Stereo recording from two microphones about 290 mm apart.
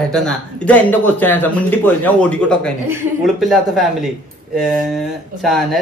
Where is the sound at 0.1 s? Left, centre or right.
Centre.